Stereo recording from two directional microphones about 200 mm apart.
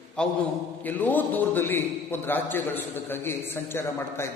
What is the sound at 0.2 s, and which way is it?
A man's voice, 5° left (ahead or behind).